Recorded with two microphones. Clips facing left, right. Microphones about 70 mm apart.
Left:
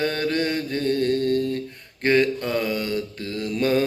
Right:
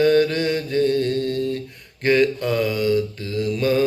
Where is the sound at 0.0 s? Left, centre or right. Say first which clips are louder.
Right 6 dB; left.